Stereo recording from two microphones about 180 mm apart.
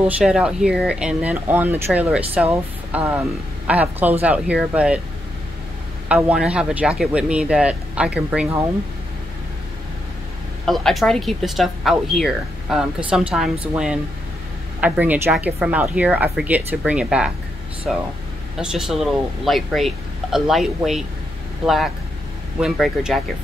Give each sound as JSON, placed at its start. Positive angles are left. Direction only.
{"t": 0.2, "sound": "speech", "side_deg": -5}
{"t": 6.0, "sound": "speech", "side_deg": -5}
{"t": 10.6, "sound": "speech", "side_deg": 0}
{"t": 18.6, "sound": "speech", "side_deg": -5}